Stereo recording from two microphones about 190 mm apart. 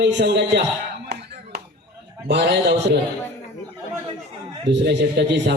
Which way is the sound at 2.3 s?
65° right (ahead or behind).